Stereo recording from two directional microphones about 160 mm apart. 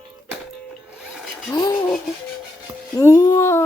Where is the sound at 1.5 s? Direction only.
20° left (ahead or behind).